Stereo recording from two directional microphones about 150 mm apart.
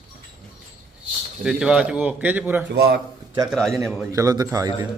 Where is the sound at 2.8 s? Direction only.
90° right.